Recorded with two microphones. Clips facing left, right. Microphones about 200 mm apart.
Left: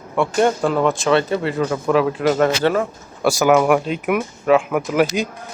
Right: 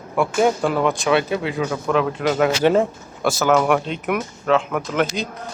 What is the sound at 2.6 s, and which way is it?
Speech, 25° right (ahead or behind).